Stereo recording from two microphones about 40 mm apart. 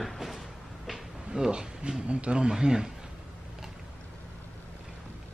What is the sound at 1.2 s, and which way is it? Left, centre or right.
Speech, centre.